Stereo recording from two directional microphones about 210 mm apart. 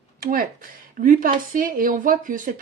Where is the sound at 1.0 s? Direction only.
40° right (ahead or behind).